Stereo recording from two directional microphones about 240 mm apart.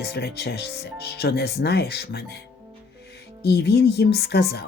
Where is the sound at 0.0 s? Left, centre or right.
Left.